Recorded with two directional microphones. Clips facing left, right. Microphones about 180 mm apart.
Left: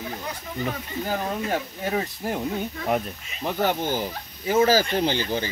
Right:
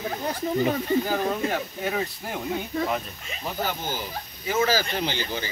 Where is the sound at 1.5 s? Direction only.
30° left (ahead or behind).